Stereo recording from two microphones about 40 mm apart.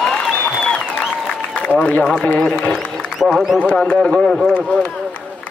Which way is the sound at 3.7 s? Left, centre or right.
Left.